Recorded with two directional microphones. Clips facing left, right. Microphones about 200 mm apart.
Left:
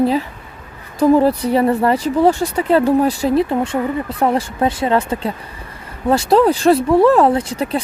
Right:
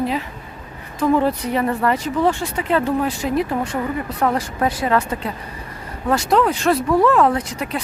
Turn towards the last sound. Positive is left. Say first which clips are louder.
# left 5 dB
turn(degrees=30)  # may be behind; listen again after turning